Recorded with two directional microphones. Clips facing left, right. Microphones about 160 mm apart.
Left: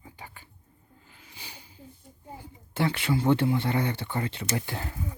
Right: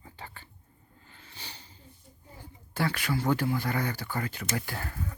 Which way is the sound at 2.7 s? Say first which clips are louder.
Left 3 dB; 25° left (ahead or behind).